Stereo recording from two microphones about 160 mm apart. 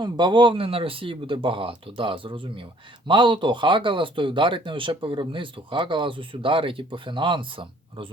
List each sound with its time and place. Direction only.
0.0 s speech: 30° right (ahead or behind)